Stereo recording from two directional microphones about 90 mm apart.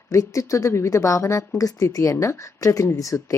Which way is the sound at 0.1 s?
35° left (ahead or behind).